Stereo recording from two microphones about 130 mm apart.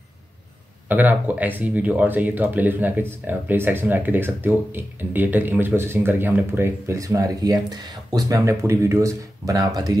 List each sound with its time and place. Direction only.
0.8 s speech: 10° right (ahead or behind); by 9.9 s 30° right (ahead or behind)